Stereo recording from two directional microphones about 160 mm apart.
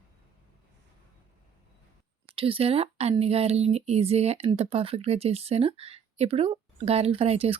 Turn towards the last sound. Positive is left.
turn(degrees=-35)  # may be behind; listen again after turning